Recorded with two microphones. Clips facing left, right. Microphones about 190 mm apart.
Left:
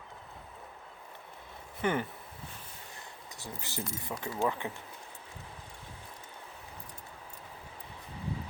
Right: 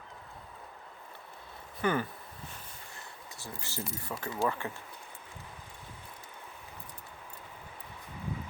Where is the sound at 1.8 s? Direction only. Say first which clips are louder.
Right 1 dB; 20° left (ahead or behind).